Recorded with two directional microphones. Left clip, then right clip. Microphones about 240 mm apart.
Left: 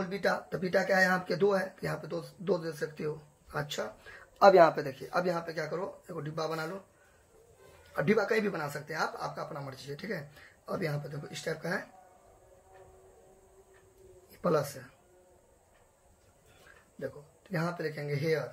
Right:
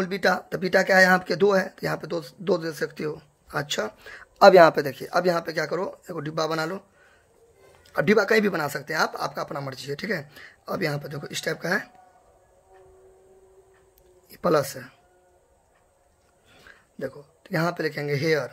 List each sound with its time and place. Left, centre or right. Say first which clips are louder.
0.0 s speech: right 8 dB; right
7.9 s speech: right 8 dB; right
14.3 s speech: right 7 dB; right
17.0 s speech: right 7 dB; right